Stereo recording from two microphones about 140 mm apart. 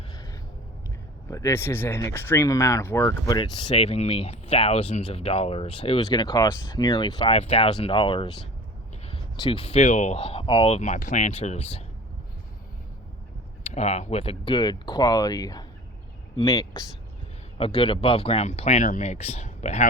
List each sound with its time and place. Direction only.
0.1 s a sound: 25° left (ahead or behind)
1.3 s speech: 20° left (ahead or behind)
3.7 s speech: 45° left (ahead or behind)
6.1 s speech: 30° left (ahead or behind); by 10.2 s 60° left (ahead or behind)
10.2 s speech: 40° left (ahead or behind)
13.7 s speech: 50° left (ahead or behind); by 16.8 s 25° left (ahead or behind)
17.6 s speech: 40° left (ahead or behind); by 19.9 s 55° left (ahead or behind)